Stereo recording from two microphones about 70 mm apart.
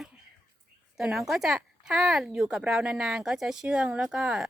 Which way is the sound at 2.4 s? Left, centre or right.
Centre.